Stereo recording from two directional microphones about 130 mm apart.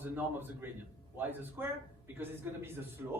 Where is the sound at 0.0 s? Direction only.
15° right (ahead or behind).